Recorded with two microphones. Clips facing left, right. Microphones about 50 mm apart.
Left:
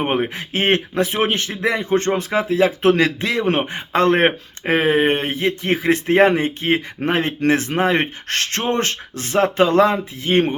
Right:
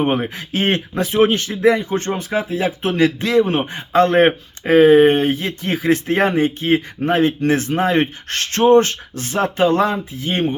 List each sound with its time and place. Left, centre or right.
0.0 s speech: left
3.2 s speech: left